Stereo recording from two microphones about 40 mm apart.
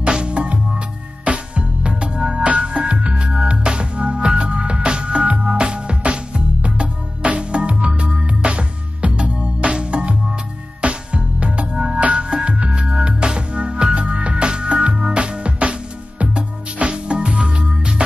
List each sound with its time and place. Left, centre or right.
0.2 s music: right
11.7 s music: centre
12.0 s music: right